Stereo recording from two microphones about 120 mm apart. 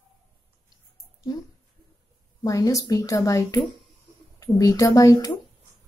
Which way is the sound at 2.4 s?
30° left (ahead or behind).